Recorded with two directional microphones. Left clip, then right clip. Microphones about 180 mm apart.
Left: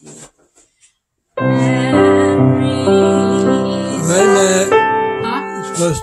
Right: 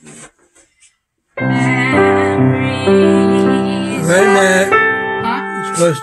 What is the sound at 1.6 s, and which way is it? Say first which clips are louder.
Music: right 1 dB; 15° right (ahead or behind).